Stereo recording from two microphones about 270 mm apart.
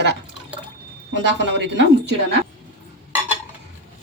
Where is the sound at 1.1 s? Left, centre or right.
Right.